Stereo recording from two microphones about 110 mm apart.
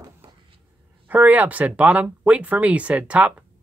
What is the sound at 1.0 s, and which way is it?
Speech, 15° right (ahead or behind).